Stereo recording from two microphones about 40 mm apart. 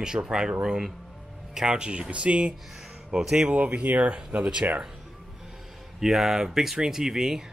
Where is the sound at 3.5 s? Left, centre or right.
Right.